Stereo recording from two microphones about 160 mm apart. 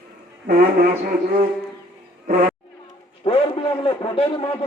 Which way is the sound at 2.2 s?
55° right (ahead or behind).